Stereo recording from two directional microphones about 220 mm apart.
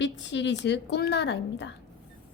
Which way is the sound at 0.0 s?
55° left (ahead or behind).